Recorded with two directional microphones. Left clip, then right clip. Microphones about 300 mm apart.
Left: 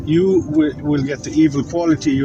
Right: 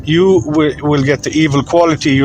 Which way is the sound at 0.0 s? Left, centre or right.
Right.